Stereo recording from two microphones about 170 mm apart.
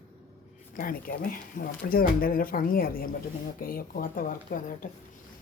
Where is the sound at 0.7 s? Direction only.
55° left (ahead or behind).